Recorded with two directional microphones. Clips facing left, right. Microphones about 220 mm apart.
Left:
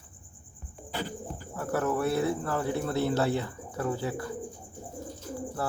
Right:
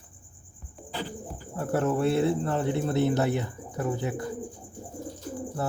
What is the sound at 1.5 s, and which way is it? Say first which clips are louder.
Speech: right 3 dB; 25° right (ahead or behind).